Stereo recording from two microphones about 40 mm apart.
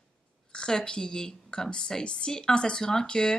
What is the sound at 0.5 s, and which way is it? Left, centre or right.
A woman's voice, centre.